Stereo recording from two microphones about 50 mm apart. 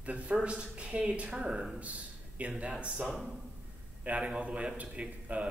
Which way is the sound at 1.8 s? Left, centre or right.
Right.